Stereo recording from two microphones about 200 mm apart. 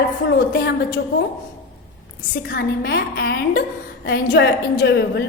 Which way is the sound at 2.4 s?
50° left (ahead or behind).